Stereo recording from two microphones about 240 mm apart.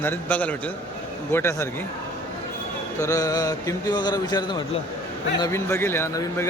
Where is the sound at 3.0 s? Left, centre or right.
Centre.